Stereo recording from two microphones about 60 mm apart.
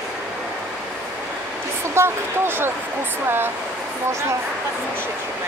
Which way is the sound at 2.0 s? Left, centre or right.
Right.